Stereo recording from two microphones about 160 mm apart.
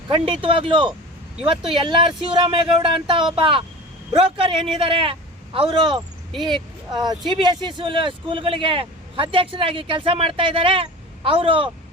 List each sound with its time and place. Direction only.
0.1 s speech: 35° right (ahead or behind)